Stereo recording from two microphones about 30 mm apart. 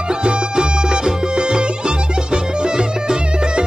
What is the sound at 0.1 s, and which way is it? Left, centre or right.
Music, right.